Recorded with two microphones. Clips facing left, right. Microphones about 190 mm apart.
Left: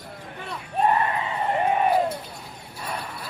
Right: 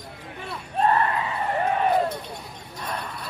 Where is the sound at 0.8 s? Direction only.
15° left (ahead or behind).